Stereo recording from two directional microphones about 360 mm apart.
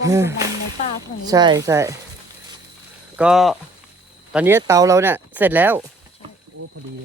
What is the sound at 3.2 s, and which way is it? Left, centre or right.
Speech, centre.